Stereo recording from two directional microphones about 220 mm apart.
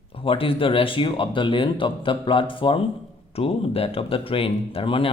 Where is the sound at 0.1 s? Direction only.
25° left (ahead or behind).